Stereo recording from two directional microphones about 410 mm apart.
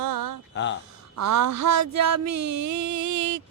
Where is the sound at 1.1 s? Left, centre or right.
Right.